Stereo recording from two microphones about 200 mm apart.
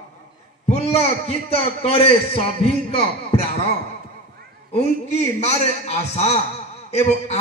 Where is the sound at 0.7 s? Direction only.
30° left (ahead or behind).